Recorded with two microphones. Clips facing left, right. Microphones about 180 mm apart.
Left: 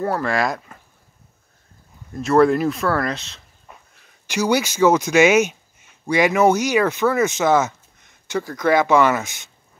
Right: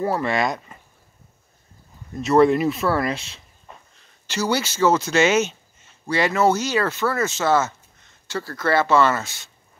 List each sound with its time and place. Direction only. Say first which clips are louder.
0.0 s speech: left 1 dB; centre (ahead or behind)
2.1 s speech: left 1 dB; centre (ahead or behind)
3.6 s speech: right 1 dB; 5° left (ahead or behind)